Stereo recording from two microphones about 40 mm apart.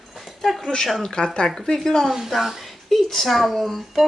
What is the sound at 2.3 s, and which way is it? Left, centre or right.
Speech, centre.